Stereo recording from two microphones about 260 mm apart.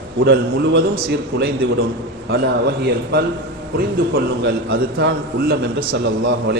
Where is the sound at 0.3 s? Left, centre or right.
Right.